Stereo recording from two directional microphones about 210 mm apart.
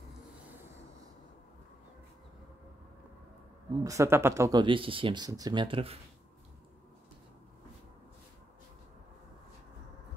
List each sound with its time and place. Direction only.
3.8 s speech: 15° right (ahead or behind)